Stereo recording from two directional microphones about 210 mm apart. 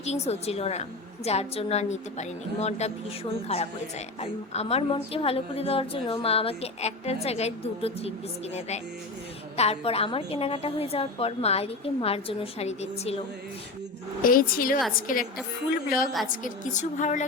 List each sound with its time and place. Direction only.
0.0 s a woman's voice: 30° left (ahead or behind)
9.6 s a woman's voice: 30° left (ahead or behind)
14.2 s a woman's voice: 40° left (ahead or behind)
16.4 s a woman's voice: 35° left (ahead or behind)